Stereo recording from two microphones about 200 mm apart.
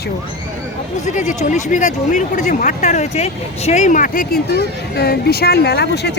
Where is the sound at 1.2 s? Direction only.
35° left (ahead or behind).